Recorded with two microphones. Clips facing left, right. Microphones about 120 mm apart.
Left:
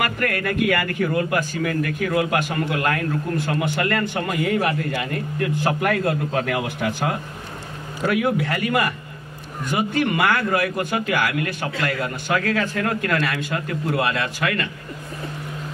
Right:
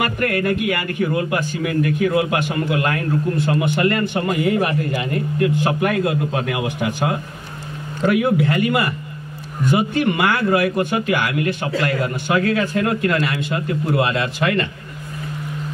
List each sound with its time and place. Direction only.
0.0 s a man's voice: 25° right (ahead or behind)